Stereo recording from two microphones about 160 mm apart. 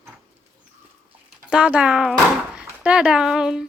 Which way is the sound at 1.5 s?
10° right (ahead or behind).